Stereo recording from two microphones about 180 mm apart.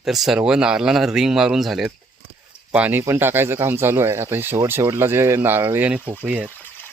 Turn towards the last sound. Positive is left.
turn(degrees=10)  # may be behind; listen again after turning